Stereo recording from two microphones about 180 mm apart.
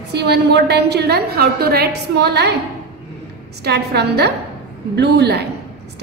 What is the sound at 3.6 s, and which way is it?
A woman's voice, 65° right (ahead or behind).